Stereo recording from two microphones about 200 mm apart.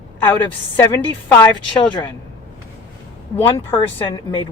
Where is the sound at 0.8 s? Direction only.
15° left (ahead or behind).